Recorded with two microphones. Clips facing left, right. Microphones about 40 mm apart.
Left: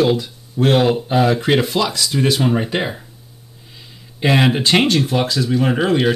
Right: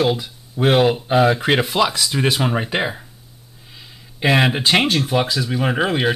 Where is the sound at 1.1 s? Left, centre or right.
Centre.